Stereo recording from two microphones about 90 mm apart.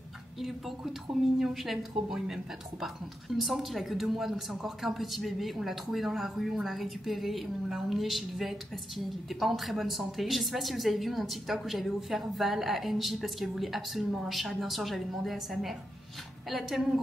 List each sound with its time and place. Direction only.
0.4 s a woman's voice: centre (ahead or behind)